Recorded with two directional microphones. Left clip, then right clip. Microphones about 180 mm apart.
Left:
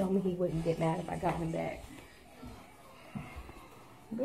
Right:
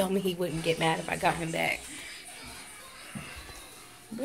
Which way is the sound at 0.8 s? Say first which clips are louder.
Right 6 dB; 20° right (ahead or behind).